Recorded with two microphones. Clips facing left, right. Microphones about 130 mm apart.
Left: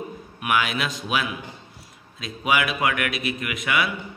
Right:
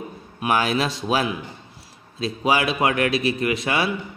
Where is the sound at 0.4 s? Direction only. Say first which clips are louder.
Right 3 dB; 35° right (ahead or behind).